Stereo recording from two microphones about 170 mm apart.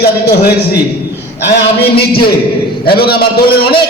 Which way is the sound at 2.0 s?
65° left (ahead or behind).